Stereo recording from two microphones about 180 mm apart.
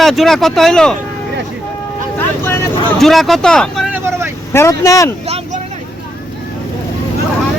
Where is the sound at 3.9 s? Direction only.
15° right (ahead or behind).